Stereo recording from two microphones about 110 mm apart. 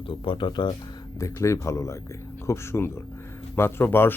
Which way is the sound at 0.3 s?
50° left (ahead or behind).